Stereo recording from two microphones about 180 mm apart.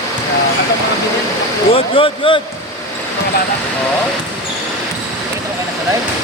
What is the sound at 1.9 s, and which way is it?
Speech, 30° left (ahead or behind).